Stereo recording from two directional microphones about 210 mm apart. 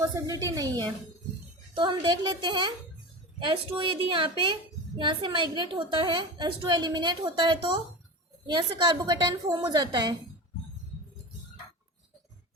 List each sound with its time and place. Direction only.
0.0 s a woman's voice: 15° right (ahead or behind)